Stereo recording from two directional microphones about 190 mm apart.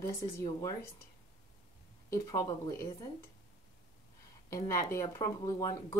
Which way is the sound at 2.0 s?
20° left (ahead or behind).